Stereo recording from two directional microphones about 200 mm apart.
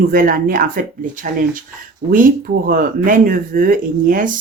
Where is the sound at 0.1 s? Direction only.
45° right (ahead or behind).